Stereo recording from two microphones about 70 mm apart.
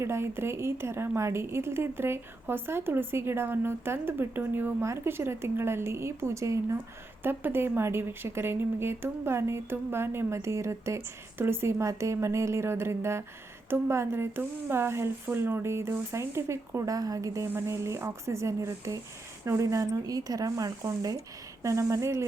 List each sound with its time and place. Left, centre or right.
0.0 s a woman's voice: right
7.2 s a woman's voice: right
17.5 s speech: right
21.6 s speech: right